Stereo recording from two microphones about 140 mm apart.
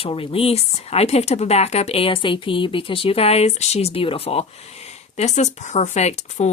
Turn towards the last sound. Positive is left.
turn(degrees=55)  # may be behind; listen again after turning